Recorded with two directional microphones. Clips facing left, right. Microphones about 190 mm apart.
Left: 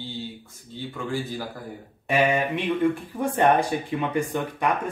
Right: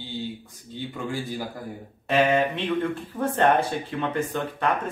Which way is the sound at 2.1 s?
10° left (ahead or behind).